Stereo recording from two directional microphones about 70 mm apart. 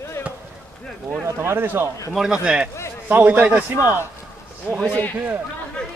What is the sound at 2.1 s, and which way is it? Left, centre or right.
A man's voice, centre.